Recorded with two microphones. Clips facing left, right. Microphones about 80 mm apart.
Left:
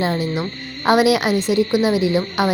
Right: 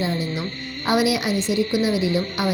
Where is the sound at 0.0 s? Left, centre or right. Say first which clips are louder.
Left 4 dB; left.